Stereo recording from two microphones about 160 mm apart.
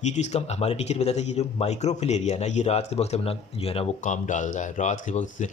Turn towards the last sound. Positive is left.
turn(degrees=50)  # may be behind; listen again after turning